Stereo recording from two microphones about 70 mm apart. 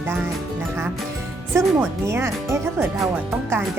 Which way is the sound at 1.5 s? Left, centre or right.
Right.